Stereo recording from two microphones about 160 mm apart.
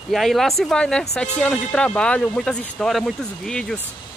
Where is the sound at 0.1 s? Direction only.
Centre (ahead or behind).